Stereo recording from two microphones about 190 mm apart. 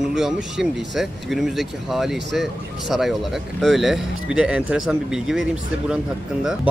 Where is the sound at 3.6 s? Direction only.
Centre (ahead or behind).